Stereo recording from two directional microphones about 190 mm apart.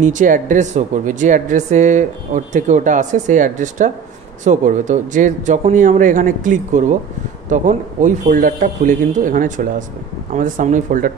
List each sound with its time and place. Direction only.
0.0 s a woman's voice: 45° right (ahead or behind)